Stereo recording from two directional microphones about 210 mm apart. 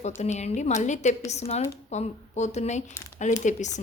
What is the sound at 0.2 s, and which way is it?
A woman's voice, 30° left (ahead or behind).